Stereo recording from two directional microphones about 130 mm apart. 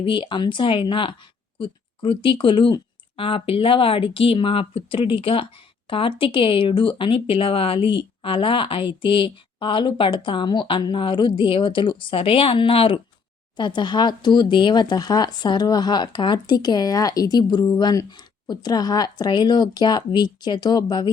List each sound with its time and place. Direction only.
0.0 s speech: 40° left (ahead or behind)